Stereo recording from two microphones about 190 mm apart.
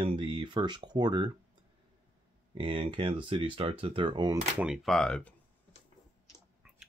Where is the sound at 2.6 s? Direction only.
25° right (ahead or behind).